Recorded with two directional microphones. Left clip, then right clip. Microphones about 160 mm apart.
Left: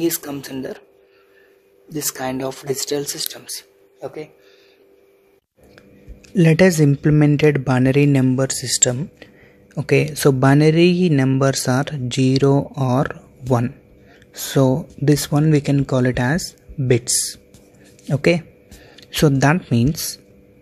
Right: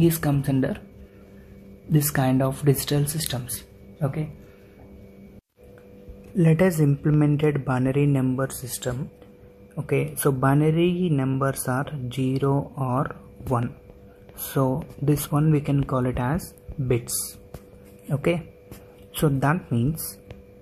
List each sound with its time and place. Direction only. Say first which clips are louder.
0.0 s speech: left 1 dB; 45° left (ahead or behind)
2.0 s speech: right 1 dB; 45° left (ahead or behind)
6.3 s speech: left 7 dB; 50° left (ahead or behind)
9.8 s speech: left 8 dB; 40° left (ahead or behind); by 13.7 s 55° left (ahead or behind)
14.7 s speech: left 7 dB; 30° left (ahead or behind)
18.1 s speech: left 7 dB; 45° left (ahead or behind)